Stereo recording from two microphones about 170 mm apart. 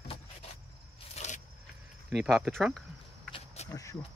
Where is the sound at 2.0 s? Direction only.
Centre (ahead or behind).